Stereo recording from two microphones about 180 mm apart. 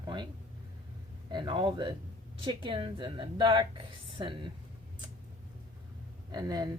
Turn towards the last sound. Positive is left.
turn(degrees=-20)  # may be behind; listen again after turning